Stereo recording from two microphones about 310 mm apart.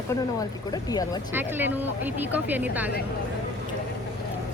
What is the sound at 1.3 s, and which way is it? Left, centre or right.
A woman's voice, centre.